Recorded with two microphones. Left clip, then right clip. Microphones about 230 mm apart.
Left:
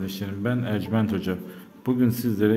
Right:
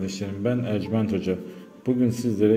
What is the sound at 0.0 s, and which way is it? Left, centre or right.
A man's voice, centre.